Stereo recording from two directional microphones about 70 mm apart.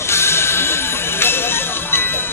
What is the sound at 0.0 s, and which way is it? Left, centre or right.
Music, left.